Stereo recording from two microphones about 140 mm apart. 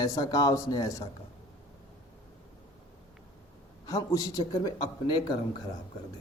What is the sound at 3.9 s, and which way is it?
A man's voice, 25° left (ahead or behind).